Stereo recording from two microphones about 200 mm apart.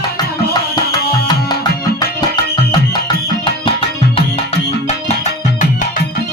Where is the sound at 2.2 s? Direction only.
20° left (ahead or behind).